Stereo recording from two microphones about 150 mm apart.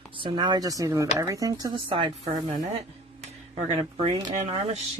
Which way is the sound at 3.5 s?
35° right (ahead or behind).